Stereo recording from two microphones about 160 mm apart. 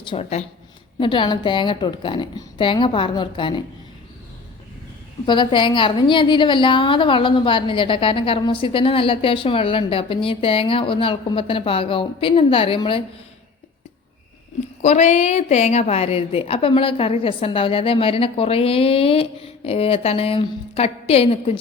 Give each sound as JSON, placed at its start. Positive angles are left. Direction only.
{"t": 0.0, "sound": "a woman's voice", "side_deg": 35}
{"t": 5.2, "sound": "a woman's voice", "side_deg": 30}
{"t": 14.8, "sound": "a woman's voice", "side_deg": 45}